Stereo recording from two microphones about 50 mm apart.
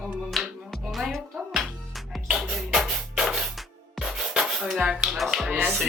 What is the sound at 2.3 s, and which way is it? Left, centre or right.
Music, centre.